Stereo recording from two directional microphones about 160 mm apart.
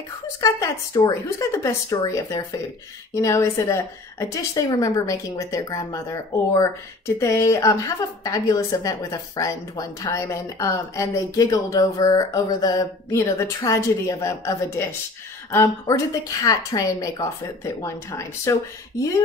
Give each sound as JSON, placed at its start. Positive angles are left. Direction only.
{"t": 0.4, "sound": "a woman's voice", "side_deg": 20}